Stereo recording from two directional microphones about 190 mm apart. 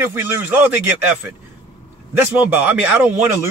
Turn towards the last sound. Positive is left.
turn(degrees=-10)  # may be behind; listen again after turning